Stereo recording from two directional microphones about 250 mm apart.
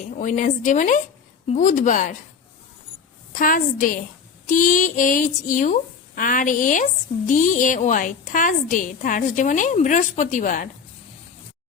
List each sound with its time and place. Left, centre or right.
0.0 s a woman's voice: left
3.3 s a woman's voice: left